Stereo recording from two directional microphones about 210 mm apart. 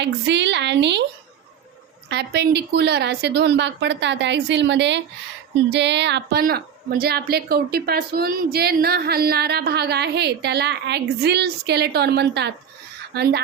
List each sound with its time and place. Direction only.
0.0 s a woman's voice: 55° right (ahead or behind)
2.0 s a woman's voice: 55° right (ahead or behind)